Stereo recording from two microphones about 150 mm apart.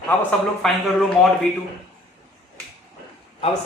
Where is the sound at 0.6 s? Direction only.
5° left (ahead or behind).